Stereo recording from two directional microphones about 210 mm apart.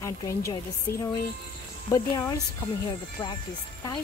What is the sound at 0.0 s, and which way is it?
A woman's voice, 15° left (ahead or behind).